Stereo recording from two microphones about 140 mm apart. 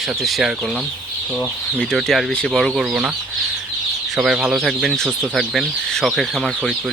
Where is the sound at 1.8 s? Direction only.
5° left (ahead or behind).